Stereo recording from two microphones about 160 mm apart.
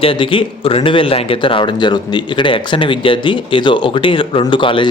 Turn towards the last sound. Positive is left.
turn(degrees=30)  # may be behind; listen again after turning